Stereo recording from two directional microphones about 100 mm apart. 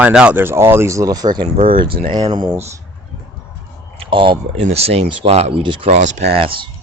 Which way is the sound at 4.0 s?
60° right (ahead or behind).